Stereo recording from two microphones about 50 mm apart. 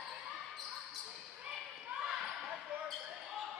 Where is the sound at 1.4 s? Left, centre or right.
Centre.